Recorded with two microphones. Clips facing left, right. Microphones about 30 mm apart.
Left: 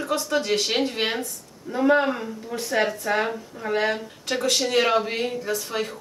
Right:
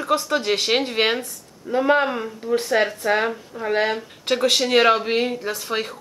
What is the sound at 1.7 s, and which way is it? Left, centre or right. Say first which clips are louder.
Speech: right 2 dB; right.